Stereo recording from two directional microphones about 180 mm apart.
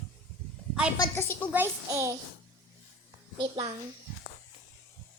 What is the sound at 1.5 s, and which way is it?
Child singing, 15° right (ahead or behind).